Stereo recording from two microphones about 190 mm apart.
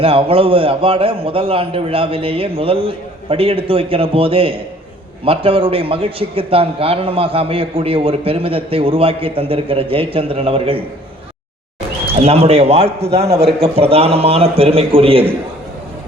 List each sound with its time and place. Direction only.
0.0 s a man's voice: 30° right (ahead or behind)
12.2 s a man's voice: 35° right (ahead or behind)